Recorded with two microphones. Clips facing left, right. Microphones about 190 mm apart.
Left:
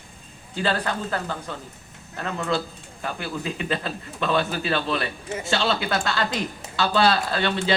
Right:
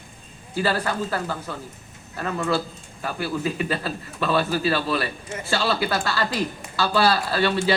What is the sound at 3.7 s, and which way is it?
A man's voice, 5° right (ahead or behind).